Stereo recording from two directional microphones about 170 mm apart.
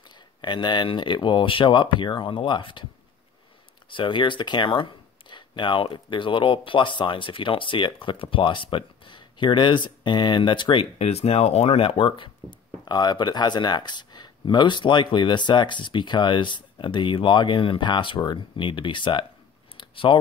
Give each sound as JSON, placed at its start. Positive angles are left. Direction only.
{"t": 0.4, "sound": "speech", "side_deg": 25}
{"t": 3.9, "sound": "speech", "side_deg": 30}
{"t": 19.8, "sound": "a sound", "side_deg": 30}